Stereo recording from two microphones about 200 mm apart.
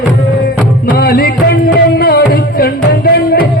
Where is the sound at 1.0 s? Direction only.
50° left (ahead or behind).